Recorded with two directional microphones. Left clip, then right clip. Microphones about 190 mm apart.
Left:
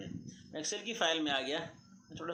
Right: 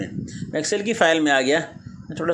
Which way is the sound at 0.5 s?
50° right (ahead or behind).